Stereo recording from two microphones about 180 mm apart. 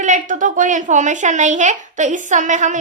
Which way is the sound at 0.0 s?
45° right (ahead or behind).